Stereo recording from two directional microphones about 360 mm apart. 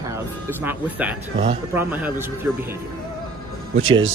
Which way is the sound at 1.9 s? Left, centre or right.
Centre.